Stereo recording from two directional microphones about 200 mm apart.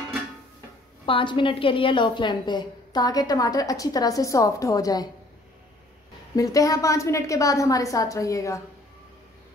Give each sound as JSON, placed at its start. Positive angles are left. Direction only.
{"t": 1.0, "sound": "a woman's voice", "side_deg": 25}
{"t": 6.3, "sound": "a woman's voice", "side_deg": 15}